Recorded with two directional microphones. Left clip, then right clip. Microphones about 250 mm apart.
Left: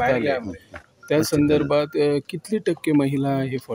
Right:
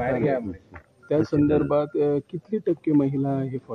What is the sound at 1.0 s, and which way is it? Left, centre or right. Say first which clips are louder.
Speech: left 2 dB; left.